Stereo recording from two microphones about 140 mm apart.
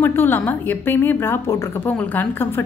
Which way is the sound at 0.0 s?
15° left (ahead or behind).